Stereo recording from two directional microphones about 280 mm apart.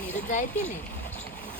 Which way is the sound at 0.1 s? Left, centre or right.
Left.